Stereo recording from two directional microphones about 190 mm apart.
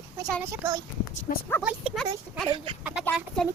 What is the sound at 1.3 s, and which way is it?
Speech, 50° left (ahead or behind).